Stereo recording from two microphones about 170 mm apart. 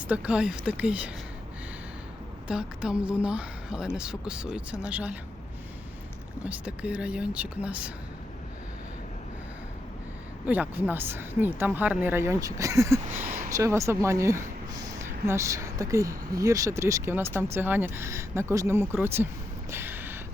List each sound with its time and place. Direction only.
0.0 s speech: 10° right (ahead or behind)
2.5 s a woman's voice: 5° right (ahead or behind)
6.4 s speech: 10° right (ahead or behind)
10.4 s speech: 10° right (ahead or behind)
19.7 s a sound: 10° right (ahead or behind)